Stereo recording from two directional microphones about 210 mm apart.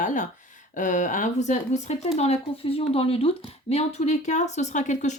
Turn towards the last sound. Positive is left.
turn(degrees=35)  # may be behind; listen again after turning